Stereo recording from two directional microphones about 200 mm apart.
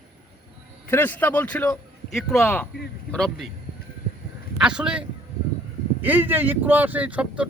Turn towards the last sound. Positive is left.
turn(degrees=-5)  # may be behind; listen again after turning